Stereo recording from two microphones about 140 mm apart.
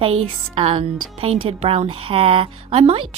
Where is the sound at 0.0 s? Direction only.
40° right (ahead or behind).